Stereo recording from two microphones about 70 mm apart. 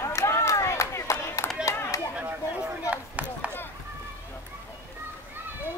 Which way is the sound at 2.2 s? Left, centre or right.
Right.